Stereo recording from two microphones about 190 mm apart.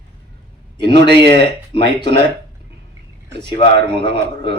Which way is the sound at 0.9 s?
60° right (ahead or behind).